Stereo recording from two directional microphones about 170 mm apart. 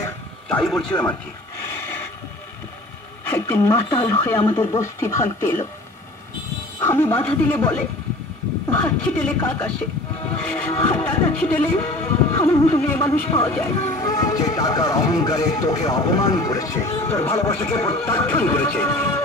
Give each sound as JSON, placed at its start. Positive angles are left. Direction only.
{"t": 0.5, "sound": "speech", "side_deg": 5}
{"t": 3.3, "sound": "music", "side_deg": 15}
{"t": 6.8, "sound": "speech", "side_deg": 15}
{"t": 7.2, "sound": "music", "side_deg": 10}
{"t": 10.8, "sound": "speech", "side_deg": 10}
{"t": 18.0, "sound": "music", "side_deg": 15}